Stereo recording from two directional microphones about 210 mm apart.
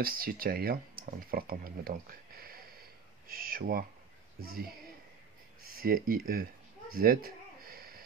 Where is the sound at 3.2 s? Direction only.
45° right (ahead or behind).